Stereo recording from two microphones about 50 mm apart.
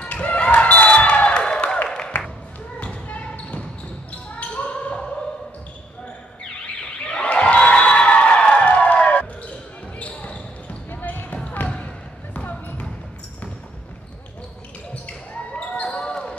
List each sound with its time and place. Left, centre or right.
0.0 s basketball bounce: left
1.9 s music: centre
2.8 s basketball bounce: left
4.9 s opera: centre
7.1 s a sound: left
9.9 s basketball bounce: left
10.9 s basketball bounce: left
11.6 s basketball bounce: centre
12.4 s basketball bounce: left
15.3 s basketball bounce: left